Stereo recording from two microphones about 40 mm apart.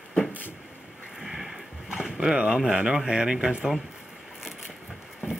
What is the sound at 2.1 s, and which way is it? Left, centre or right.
Speech, centre.